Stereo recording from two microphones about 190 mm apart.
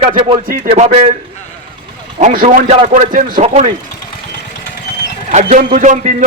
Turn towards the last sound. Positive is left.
turn(degrees=-40)  # may be behind; listen again after turning